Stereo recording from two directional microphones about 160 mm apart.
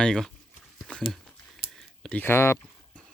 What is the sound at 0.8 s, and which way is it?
Dog, 5° left (ahead or behind).